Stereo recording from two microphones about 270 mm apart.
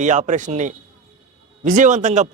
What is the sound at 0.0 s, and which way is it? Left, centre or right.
A man's voice, right.